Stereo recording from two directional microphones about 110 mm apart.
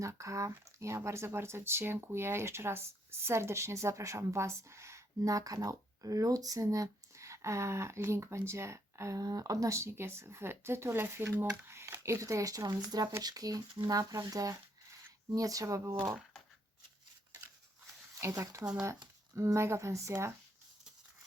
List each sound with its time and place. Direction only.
0.0 s speech: 30° right (ahead or behind)
18.1 s speech: 25° right (ahead or behind)
18.6 s speech: 10° right (ahead or behind)
19.4 s speech: 25° right (ahead or behind)